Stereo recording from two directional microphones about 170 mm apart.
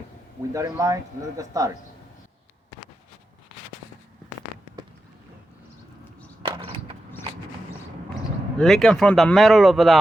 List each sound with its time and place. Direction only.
0.5 s speech: 20° right (ahead or behind)
6.6 s a sound: 30° right (ahead or behind)
8.5 s speech: centre (ahead or behind)